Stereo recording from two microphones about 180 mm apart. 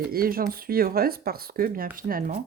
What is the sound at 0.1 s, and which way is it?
Speech, 55° right (ahead or behind).